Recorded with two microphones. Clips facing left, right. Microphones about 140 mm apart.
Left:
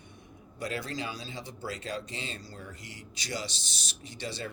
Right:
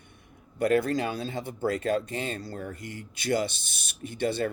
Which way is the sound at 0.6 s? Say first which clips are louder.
Right 11 dB; 55° right (ahead or behind).